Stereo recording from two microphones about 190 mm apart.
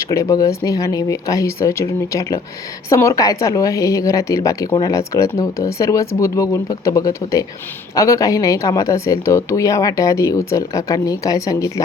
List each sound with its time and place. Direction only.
0.1 s a woman's voice: 15° left (ahead or behind)